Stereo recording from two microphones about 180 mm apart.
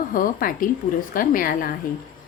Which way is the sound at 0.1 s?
55° left (ahead or behind).